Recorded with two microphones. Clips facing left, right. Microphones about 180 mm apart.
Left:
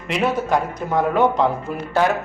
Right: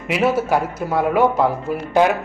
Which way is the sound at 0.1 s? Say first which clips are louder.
Right 2 dB; 5° right (ahead or behind).